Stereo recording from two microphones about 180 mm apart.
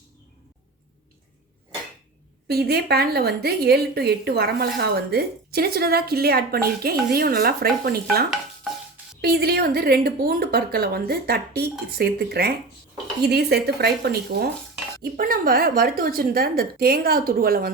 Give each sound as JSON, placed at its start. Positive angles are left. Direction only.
{"t": 2.5, "sound": "speech", "side_deg": -60}
{"t": 9.2, "sound": "speech", "side_deg": -60}